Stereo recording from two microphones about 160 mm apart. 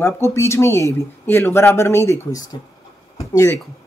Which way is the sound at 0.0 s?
20° left (ahead or behind).